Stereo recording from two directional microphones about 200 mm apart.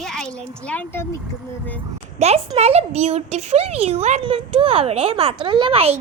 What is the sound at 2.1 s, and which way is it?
A child's voice, 30° right (ahead or behind).